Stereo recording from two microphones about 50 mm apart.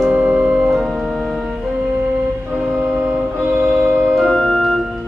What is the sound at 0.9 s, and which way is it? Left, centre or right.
Organ, centre.